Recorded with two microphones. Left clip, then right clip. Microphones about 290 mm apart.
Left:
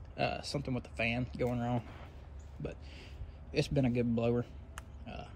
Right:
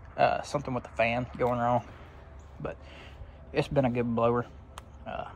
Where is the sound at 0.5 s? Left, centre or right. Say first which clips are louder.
Right 7 dB; centre.